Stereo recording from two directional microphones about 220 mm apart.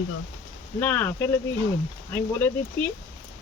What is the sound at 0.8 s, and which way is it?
Speech, 10° left (ahead or behind).